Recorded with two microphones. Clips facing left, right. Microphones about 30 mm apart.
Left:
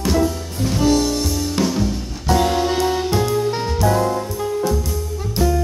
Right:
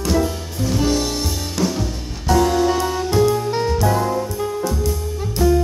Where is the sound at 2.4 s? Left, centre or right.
Left.